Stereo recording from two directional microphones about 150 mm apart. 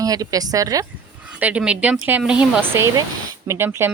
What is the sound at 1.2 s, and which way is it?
Speech, 10° right (ahead or behind).